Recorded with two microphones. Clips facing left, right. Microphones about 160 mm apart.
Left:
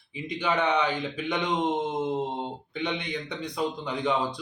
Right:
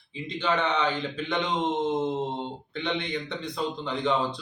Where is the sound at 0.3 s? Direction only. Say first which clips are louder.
Left 1 dB; 15° left (ahead or behind).